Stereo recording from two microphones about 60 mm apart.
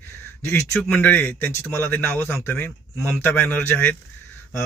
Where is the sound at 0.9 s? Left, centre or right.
Left.